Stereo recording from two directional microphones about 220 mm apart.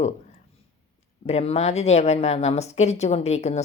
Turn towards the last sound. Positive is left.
turn(degrees=30)  # may be behind; listen again after turning